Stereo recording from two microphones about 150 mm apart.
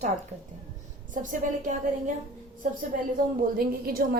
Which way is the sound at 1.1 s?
60° right (ahead or behind).